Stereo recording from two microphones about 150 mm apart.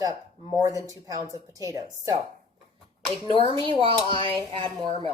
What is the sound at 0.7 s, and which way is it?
Speech, 20° left (ahead or behind).